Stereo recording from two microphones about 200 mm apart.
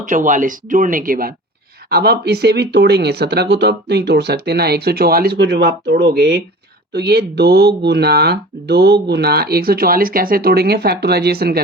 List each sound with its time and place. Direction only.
0.0 s speech: 40° right (ahead or behind)